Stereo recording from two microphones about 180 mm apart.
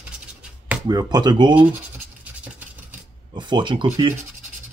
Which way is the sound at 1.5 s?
10° right (ahead or behind).